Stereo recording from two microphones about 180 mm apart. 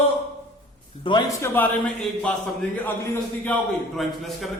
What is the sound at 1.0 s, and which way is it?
Speech, 25° left (ahead or behind).